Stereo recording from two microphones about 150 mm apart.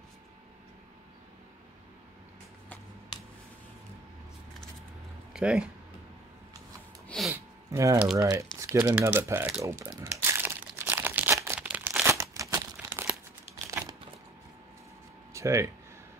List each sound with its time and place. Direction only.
5.3 s speech: 5° right (ahead or behind)
7.1 s sneeze: centre (ahead or behind)
7.3 s gasp: 20° right (ahead or behind)
8.2 s speech: 20° right (ahead or behind)
9.6 s crumpling: 20° right (ahead or behind)
15.3 s speech: 20° right (ahead or behind)